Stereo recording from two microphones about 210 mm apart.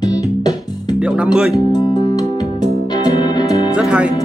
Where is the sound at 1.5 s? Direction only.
20° left (ahead or behind).